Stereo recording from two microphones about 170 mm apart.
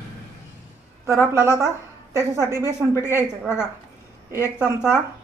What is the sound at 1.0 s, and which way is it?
A woman's voice, 15° right (ahead or behind).